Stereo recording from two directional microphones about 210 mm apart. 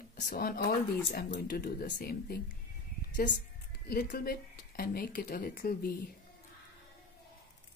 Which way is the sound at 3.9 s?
45° left (ahead or behind).